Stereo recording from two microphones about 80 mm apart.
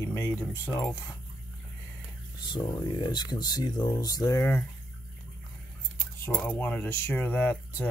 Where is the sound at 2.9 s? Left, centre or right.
Left.